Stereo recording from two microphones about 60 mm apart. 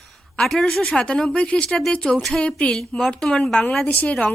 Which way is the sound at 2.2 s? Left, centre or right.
Centre.